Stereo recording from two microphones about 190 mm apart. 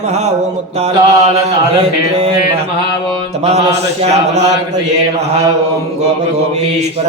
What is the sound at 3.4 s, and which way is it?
Mantra, 35° right (ahead or behind).